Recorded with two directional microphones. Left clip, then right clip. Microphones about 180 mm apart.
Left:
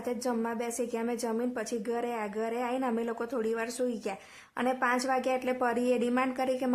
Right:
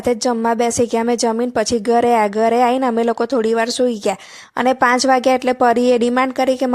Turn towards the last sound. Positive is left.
turn(degrees=-40)  # may be behind; listen again after turning